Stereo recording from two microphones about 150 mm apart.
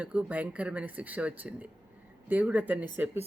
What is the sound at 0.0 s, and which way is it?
A man's voice, 10° right (ahead or behind).